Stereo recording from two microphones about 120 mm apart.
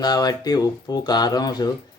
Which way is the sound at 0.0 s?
35° left (ahead or behind).